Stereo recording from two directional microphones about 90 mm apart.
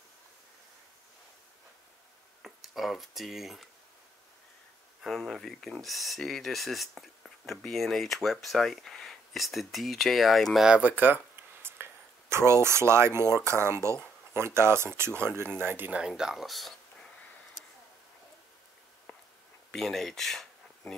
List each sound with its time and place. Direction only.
2.4 s speech: centre (ahead or behind)
5.0 s speech: 5° left (ahead or behind)
10.7 s speech: 20° right (ahead or behind)
11.3 s a sound: 25° right (ahead or behind)
13.4 s speech: 30° right (ahead or behind)
16.0 s speech: 5° right (ahead or behind)
19.7 s speech: 5° left (ahead or behind)